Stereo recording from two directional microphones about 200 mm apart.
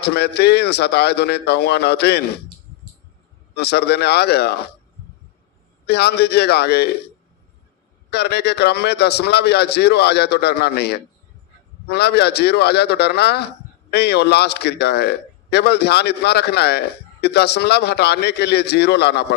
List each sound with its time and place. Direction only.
0.0 s a man's voice: 55° left (ahead or behind)
3.5 s a man's voice: 55° left (ahead or behind)
5.9 s a man's voice: 55° left (ahead or behind)
8.1 s a man's voice: 55° left (ahead or behind)